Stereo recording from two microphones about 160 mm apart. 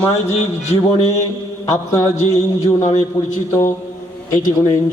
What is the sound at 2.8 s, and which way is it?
Speech, 45° left (ahead or behind).